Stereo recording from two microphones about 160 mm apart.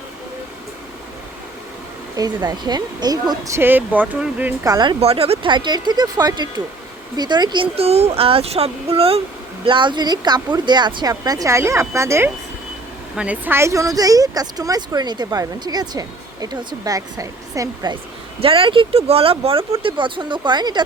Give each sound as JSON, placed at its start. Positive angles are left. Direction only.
{"t": 2.1, "sound": "speech", "side_deg": -25}
{"t": 4.6, "sound": "speech", "side_deg": -25}
{"t": 4.9, "sound": "speech", "side_deg": -40}
{"t": 18.3, "sound": "speech", "side_deg": -35}